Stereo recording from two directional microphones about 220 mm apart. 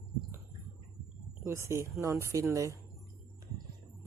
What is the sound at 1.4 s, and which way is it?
Speech, 10° right (ahead or behind).